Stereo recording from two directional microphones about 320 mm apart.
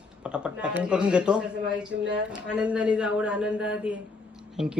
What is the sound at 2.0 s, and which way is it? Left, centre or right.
Speech, right.